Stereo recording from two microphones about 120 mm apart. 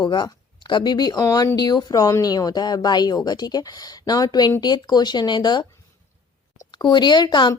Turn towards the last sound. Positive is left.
turn(degrees=40)  # may be behind; listen again after turning